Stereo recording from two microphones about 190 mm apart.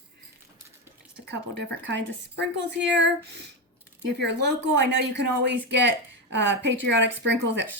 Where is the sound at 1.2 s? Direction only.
65° right (ahead or behind).